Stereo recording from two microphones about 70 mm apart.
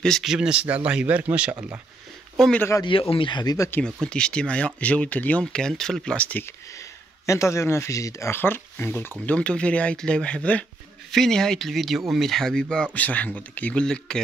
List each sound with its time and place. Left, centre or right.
0.2 s speech: centre
1.5 s speech: right
2.8 s speech: left
3.8 s speech: centre
5.4 s speech: centre
6.1 s speech: left
7.2 s speech: left
8.4 s speech: left
9.2 s speech: centre
11.1 s speech: centre